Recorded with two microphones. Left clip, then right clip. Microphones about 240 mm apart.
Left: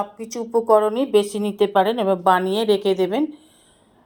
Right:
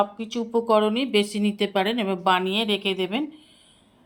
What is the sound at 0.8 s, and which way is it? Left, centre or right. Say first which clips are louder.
A woman's voice: left 4 dB; centre.